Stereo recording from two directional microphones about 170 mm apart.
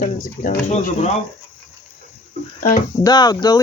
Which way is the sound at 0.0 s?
50° left (ahead or behind).